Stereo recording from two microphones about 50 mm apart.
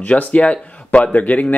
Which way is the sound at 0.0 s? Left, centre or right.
Left.